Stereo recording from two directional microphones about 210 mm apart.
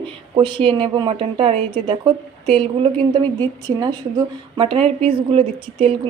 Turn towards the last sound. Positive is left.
turn(degrees=-25)  # may be behind; listen again after turning